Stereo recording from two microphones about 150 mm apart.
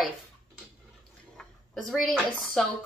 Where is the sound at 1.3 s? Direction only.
Centre (ahead or behind).